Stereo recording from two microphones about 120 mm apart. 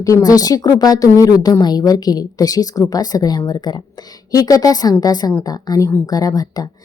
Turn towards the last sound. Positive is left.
turn(degrees=30)  # may be behind; listen again after turning